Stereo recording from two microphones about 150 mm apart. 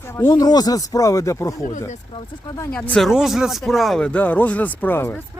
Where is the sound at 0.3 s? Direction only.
25° left (ahead or behind).